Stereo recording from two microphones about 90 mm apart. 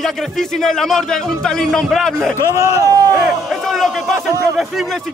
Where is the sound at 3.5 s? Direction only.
Centre (ahead or behind).